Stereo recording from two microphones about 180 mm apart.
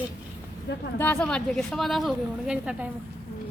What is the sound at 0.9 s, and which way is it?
A woman's voice, 5° left (ahead or behind).